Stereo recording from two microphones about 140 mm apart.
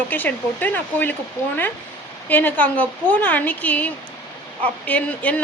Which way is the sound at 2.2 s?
15° left (ahead or behind).